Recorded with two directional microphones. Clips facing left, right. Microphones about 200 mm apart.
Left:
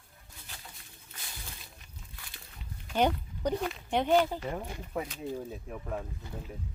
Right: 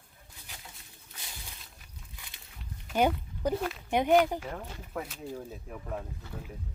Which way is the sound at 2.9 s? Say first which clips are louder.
Right 1 dB; 5° right (ahead or behind).